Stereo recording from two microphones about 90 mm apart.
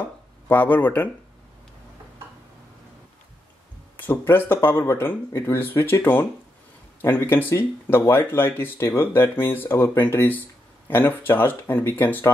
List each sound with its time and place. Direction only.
0.5 s speech: 20° left (ahead or behind)
4.0 s speech: 25° left (ahead or behind)